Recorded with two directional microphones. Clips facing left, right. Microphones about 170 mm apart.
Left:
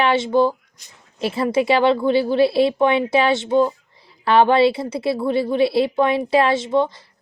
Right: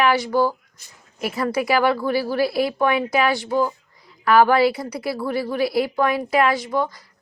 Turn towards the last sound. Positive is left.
turn(degrees=25)  # may be behind; listen again after turning